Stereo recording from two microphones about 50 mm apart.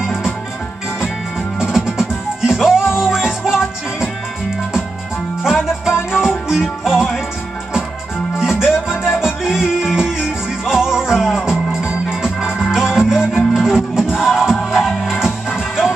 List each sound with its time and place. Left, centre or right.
1.6 s music: centre
5.4 s music: centre
8.4 s music: centre
8.8 s music: left
9.2 s music: centre